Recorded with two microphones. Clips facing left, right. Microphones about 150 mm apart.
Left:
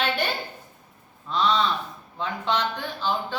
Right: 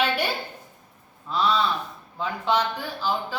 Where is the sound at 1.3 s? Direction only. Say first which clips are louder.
Even; 5° right (ahead or behind).